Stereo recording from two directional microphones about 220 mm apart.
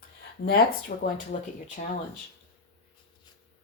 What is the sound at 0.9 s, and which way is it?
Speech, 35° left (ahead or behind).